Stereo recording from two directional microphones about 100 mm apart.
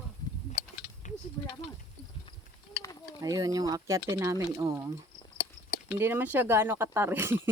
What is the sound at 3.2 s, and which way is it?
Speech, 35° right (ahead or behind).